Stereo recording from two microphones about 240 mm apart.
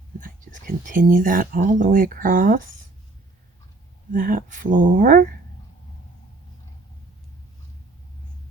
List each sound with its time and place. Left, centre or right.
0.2 s speech: right
4.1 s speech: right